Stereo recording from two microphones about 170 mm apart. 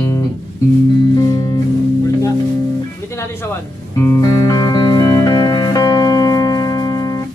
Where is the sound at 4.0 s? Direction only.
15° left (ahead or behind).